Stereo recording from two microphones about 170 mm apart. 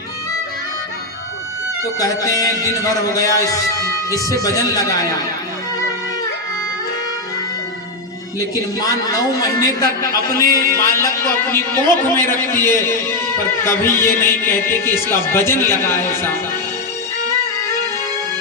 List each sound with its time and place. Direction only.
1.8 s a man's voice: 20° left (ahead or behind)
8.5 s a man's voice: 20° left (ahead or behind)